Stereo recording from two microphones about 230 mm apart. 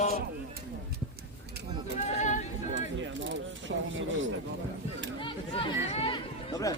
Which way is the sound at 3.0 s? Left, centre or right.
Right.